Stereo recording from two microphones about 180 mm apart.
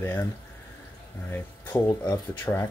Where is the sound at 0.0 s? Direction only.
10° left (ahead or behind).